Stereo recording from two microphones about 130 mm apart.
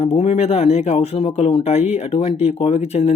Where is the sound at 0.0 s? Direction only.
50° left (ahead or behind).